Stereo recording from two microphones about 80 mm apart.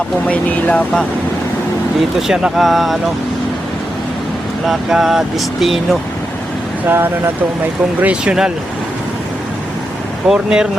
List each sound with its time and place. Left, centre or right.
0.3 s speech: centre
2.1 s speech: centre
4.6 s speech: centre
6.8 s speech: right
8.0 s speech: centre
10.2 s speech: centre